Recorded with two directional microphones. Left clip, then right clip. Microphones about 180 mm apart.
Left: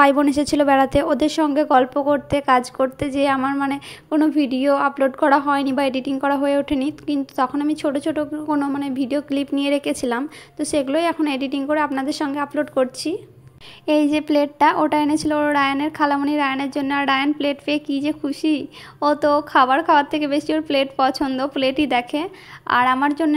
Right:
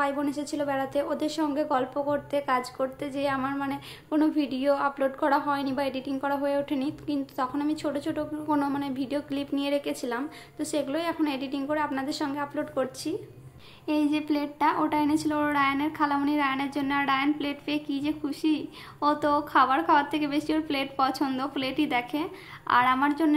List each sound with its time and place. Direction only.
0.0 s a woman's voice: 45° left (ahead or behind); by 23.3 s 30° left (ahead or behind)